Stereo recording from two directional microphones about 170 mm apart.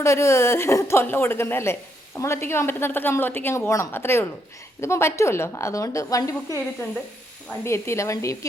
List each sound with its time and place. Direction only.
0.0 s a woman's voice: 15° left (ahead or behind)
7.6 s a woman's voice: 15° left (ahead or behind)